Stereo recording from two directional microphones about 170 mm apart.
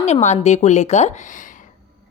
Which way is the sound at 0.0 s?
40° left (ahead or behind).